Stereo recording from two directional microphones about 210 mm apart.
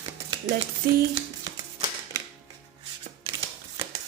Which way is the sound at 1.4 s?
20° right (ahead or behind).